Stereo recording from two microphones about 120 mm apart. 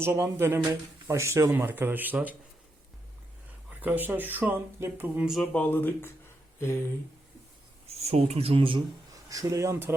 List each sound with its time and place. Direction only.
0.0 s speech: 20° right (ahead or behind)
3.8 s speech: 15° right (ahead or behind)
5.5 s speech: 15° left (ahead or behind)
7.9 s speech: 60° right (ahead or behind)
9.3 s speech: 30° right (ahead or behind)